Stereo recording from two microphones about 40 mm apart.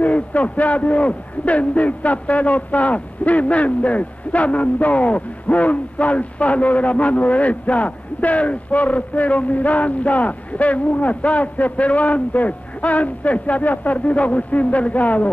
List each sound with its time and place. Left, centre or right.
0.0 s a man's voice: left